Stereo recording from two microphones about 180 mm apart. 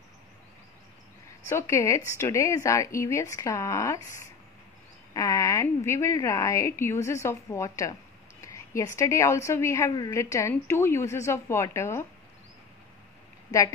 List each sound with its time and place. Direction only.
1.5 s a woman's voice: 15° left (ahead or behind)
13.5 s a woman's voice: 15° left (ahead or behind)